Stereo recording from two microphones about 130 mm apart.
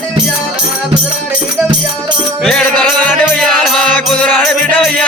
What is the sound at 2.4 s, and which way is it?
Music, 10° left (ahead or behind).